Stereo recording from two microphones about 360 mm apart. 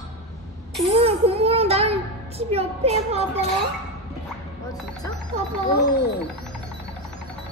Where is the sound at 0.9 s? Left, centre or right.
Centre.